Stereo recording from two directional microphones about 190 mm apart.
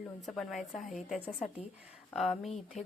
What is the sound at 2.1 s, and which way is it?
Speech, centre (ahead or behind).